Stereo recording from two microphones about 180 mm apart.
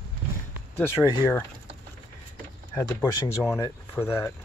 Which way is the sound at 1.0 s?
Centre (ahead or behind).